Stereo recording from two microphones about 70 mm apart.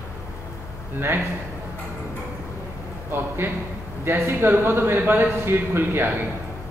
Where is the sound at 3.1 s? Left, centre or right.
Right.